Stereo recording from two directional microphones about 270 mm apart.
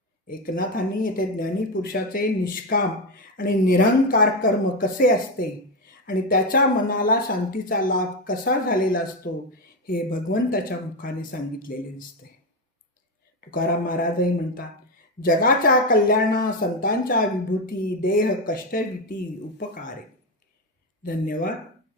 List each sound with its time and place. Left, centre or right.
1.0 s speech: left
13.5 s speech: left
21.0 s speech: left